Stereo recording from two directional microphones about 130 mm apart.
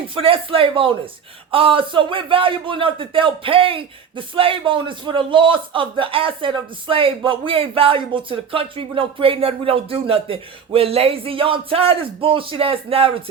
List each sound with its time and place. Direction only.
0.1 s a man's voice: 45° right (ahead or behind)